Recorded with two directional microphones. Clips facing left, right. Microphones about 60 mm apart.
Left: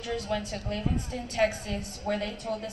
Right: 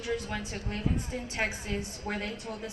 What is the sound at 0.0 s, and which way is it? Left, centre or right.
A woman's voice, right.